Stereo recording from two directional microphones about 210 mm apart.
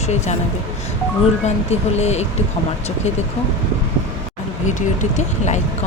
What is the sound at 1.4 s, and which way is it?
Speech, 30° left (ahead or behind).